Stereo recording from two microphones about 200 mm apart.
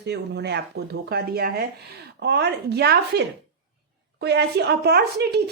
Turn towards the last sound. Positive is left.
turn(degrees=-55)  # may be behind; listen again after turning